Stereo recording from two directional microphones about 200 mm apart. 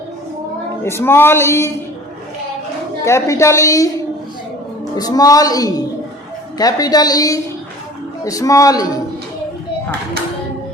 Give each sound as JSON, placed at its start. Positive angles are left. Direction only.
{"t": 0.9, "sound": "a woman's voice", "side_deg": 10}
{"t": 3.0, "sound": "a woman's voice", "side_deg": 15}
{"t": 4.9, "sound": "a woman's voice", "side_deg": 20}